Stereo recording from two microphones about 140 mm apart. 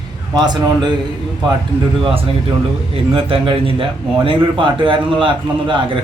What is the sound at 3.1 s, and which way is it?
A man's voice, 40° right (ahead or behind).